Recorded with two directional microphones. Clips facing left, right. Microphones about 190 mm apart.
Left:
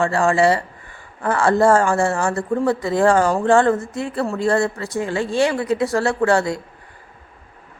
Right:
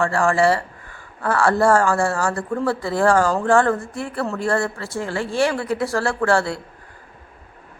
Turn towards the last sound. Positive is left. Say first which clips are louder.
# left 2 dB
turn(degrees=15)  # may be behind; listen again after turning